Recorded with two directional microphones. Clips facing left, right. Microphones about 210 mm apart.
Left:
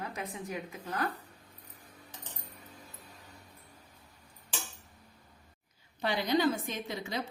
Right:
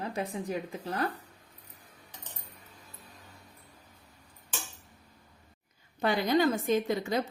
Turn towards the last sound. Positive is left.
turn(degrees=-45)  # may be behind; listen again after turning